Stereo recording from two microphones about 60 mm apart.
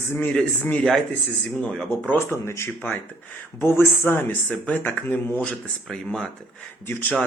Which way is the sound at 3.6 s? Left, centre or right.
Left.